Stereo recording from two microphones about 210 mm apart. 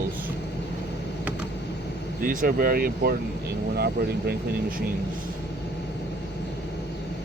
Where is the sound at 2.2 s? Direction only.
45° right (ahead or behind).